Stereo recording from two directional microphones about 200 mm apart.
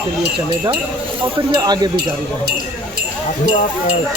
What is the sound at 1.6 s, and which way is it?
Speech, 20° right (ahead or behind).